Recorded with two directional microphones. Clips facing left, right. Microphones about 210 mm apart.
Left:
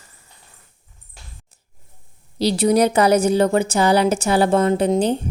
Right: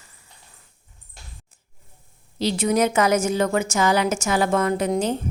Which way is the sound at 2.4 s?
35° left (ahead or behind).